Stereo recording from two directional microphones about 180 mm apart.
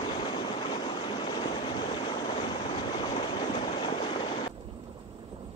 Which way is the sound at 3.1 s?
30° left (ahead or behind).